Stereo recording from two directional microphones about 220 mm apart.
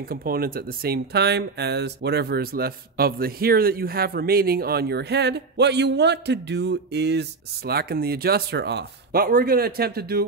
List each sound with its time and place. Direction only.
0.0 s speech: 40° right (ahead or behind)